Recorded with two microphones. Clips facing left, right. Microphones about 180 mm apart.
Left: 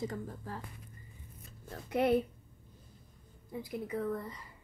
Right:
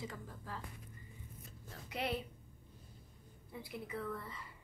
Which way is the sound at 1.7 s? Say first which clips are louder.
Left 11 dB; 50° left (ahead or behind).